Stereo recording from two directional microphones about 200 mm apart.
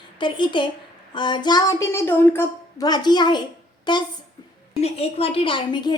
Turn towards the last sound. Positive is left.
turn(degrees=20)  # may be behind; listen again after turning